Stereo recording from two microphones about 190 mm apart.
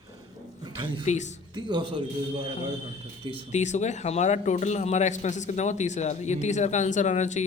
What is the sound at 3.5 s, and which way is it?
A man's voice, 35° left (ahead or behind).